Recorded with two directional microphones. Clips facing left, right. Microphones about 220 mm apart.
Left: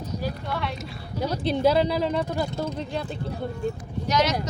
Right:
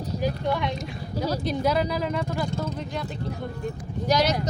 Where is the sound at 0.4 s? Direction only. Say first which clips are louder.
Right 4 dB; 20° right (ahead or behind).